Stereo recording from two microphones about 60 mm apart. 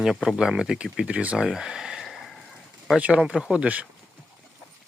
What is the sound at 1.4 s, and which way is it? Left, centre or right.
Speech, centre.